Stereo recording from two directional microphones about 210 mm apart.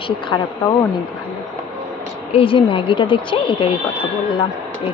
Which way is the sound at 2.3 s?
25° left (ahead or behind).